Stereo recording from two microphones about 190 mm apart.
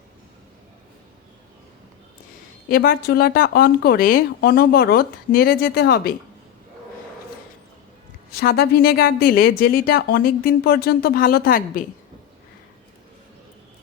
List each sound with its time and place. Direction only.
2.6 s speech: 50° left (ahead or behind)
8.3 s speech: 55° left (ahead or behind)